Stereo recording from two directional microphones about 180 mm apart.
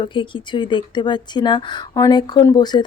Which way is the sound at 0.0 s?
25° left (ahead or behind).